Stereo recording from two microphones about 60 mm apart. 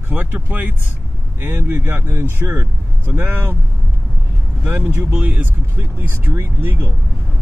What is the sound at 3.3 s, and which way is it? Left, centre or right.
Speech, right.